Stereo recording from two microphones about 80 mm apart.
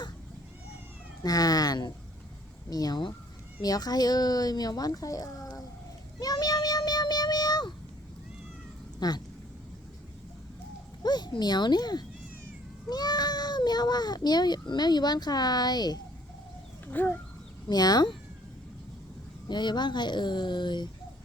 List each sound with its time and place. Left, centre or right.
1.2 s speech: left
6.1 s a sound: left
9.0 s speech: left
11.0 s a child's voice: left
16.8 s a sound: left
17.7 s speech: left
19.5 s speech: left